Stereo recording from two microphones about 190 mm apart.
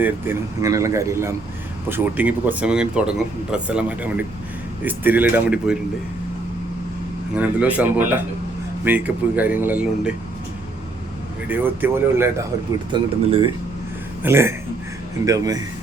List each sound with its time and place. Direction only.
0.0 s speech: 15° right (ahead or behind)
7.3 s speech: 10° right (ahead or behind)
11.4 s speech: 10° right (ahead or behind)
12.9 s speech: 25° right (ahead or behind)
14.2 s speech: 10° right (ahead or behind)